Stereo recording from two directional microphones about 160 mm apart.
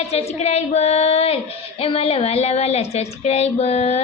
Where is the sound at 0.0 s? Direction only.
40° left (ahead or behind).